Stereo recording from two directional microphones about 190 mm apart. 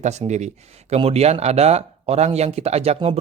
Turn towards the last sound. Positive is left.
turn(degrees=-30)  # may be behind; listen again after turning